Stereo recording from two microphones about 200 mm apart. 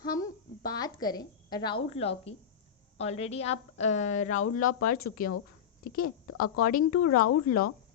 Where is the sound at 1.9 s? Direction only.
30° left (ahead or behind); by 5.3 s 50° left (ahead or behind).